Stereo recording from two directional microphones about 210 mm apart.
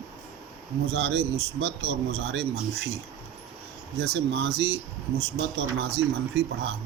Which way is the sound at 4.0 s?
55° right (ahead or behind).